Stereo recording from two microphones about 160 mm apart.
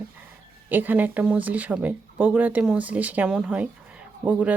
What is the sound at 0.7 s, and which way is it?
Speech, 10° right (ahead or behind).